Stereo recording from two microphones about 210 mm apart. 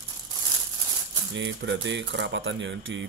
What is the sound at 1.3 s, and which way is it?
Speech, 60° right (ahead or behind).